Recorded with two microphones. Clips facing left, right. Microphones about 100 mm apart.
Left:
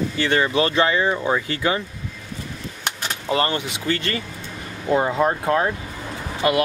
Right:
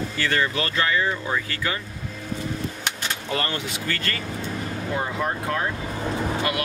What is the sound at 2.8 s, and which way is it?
Speech, 25° left (ahead or behind).